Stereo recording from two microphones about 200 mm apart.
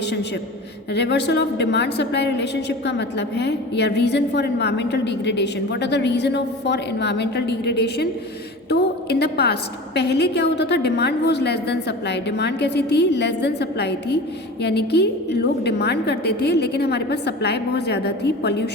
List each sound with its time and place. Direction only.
0.9 s a woman's voice: 60° left (ahead or behind)